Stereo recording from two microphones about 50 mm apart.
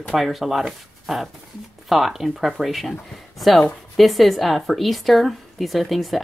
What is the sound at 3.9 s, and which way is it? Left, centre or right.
A woman's voice, centre.